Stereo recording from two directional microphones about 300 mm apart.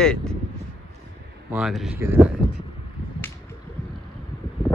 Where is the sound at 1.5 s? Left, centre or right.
Centre.